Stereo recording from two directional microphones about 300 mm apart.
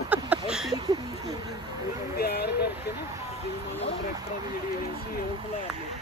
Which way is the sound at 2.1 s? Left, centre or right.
Left.